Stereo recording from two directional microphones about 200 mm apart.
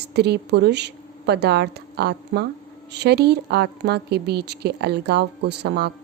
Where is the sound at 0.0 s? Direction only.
55° right (ahead or behind).